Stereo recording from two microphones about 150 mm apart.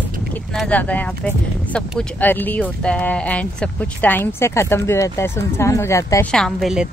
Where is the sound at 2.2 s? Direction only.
10° left (ahead or behind).